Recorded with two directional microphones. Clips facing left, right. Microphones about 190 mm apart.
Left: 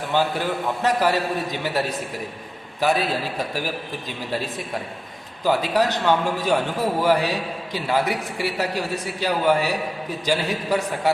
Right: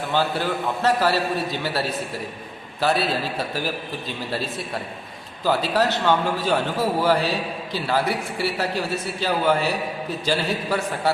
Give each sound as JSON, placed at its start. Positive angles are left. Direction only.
{"t": 0.1, "sound": "a man's voice", "side_deg": 15}
{"t": 5.5, "sound": "a man's voice", "side_deg": 15}